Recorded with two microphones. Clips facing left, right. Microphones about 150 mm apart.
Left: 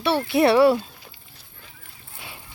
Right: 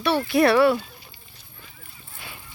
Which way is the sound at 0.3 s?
25° left (ahead or behind).